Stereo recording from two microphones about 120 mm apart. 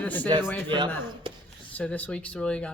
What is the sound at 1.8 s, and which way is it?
Speech, 10° left (ahead or behind).